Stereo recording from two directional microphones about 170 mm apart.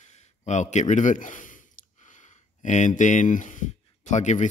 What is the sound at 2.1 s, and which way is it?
Speech, 45° left (ahead or behind).